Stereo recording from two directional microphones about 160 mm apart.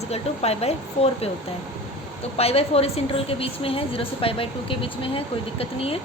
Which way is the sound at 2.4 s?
40° left (ahead or behind).